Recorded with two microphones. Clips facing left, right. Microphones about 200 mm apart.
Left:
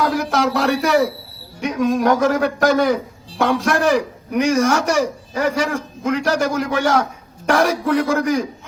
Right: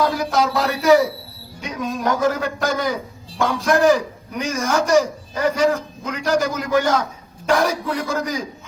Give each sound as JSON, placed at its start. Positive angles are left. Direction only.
{"t": 0.2, "sound": "a man's voice", "side_deg": 75}